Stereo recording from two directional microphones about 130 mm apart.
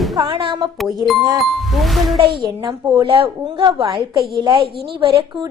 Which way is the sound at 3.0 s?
45° right (ahead or behind).